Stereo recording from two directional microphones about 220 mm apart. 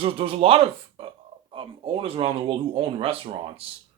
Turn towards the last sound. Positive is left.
turn(degrees=-25)  # may be behind; listen again after turning